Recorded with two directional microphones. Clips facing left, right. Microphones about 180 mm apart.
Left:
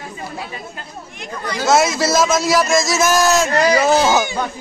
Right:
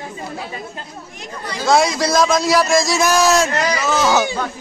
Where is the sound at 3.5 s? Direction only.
35° left (ahead or behind).